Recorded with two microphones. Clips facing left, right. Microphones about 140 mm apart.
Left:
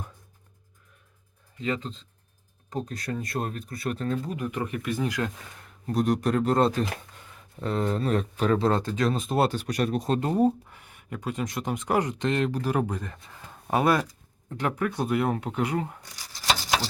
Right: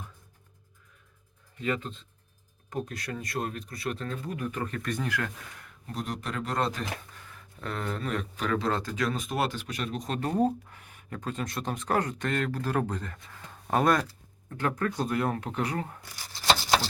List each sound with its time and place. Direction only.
1.6 s speech: 30° left (ahead or behind)
4.3 s speech: 20° left (ahead or behind)
5.9 s a man's voice: 45° left (ahead or behind)
10.3 s speech: 10° left (ahead or behind)